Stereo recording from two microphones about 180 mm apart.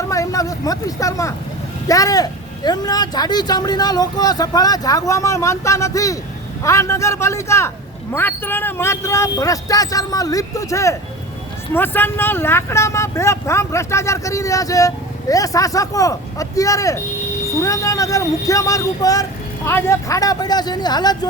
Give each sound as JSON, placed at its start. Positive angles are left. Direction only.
{"t": 0.1, "sound": "speech", "side_deg": 20}